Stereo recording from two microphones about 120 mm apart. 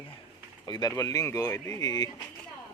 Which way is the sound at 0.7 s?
35° left (ahead or behind).